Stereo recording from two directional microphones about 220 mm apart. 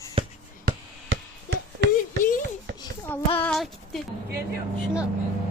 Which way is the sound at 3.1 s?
10° left (ahead or behind).